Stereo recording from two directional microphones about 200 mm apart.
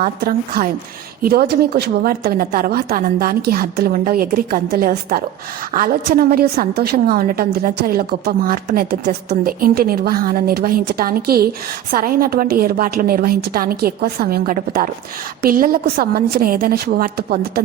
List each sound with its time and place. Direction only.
0.0 s a woman's voice: 45° right (ahead or behind)